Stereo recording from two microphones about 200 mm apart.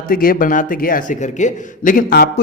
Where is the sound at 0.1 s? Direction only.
45° left (ahead or behind).